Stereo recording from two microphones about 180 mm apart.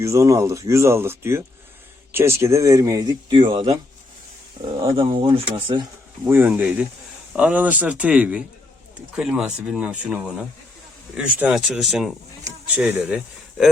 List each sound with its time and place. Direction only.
0.0 s speech: 15° right (ahead or behind)
4.8 s speech: 30° right (ahead or behind)
6.2 s speech: 10° right (ahead or behind)